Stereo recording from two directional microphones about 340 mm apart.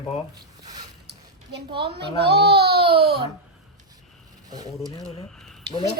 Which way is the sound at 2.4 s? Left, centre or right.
Right.